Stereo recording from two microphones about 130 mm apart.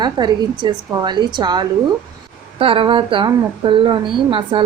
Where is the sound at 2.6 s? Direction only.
45° right (ahead or behind).